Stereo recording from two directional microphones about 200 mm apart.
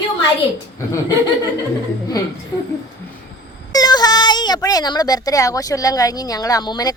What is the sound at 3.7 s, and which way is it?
A child's voice, 20° left (ahead or behind).